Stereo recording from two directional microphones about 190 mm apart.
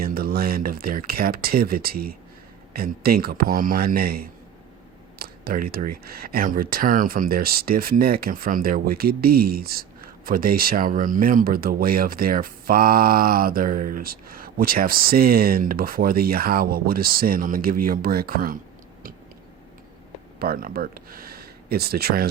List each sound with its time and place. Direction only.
0.0 s speech: 50° right (ahead or behind)
20.4 s speech: 50° right (ahead or behind)